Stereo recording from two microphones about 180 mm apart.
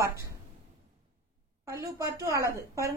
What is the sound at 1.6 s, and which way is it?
A woman's voice, 15° right (ahead or behind).